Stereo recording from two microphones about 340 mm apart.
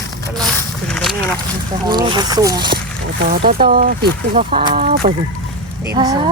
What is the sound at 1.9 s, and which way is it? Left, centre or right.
Speech, centre.